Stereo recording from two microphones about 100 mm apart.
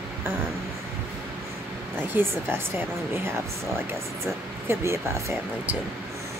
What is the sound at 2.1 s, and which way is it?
Speech, 20° right (ahead or behind).